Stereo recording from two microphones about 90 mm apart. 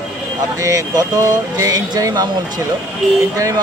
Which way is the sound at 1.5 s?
40° right (ahead or behind).